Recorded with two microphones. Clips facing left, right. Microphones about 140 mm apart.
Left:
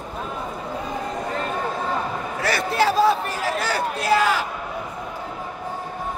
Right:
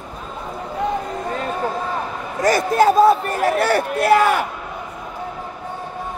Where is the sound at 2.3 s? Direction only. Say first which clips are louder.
Right 7 dB; 45° right (ahead or behind); by 4.5 s 60° right (ahead or behind).